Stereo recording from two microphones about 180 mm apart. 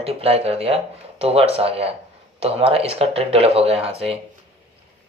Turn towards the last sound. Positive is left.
turn(degrees=-35)  # may be behind; listen again after turning